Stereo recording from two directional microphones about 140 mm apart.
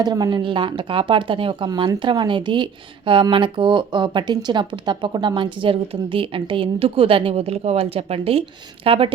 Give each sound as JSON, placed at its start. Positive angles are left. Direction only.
{"t": 0.0, "sound": "speech", "side_deg": -30}